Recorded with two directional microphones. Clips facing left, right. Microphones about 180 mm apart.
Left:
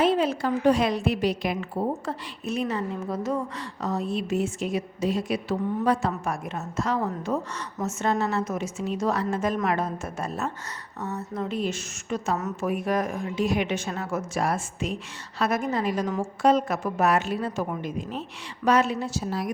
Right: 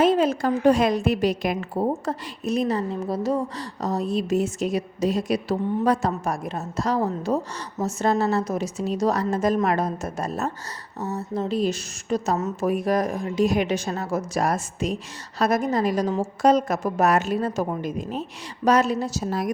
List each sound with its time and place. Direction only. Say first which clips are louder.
0.0 s a woman's voice: right 3 dB; 45° right (ahead or behind)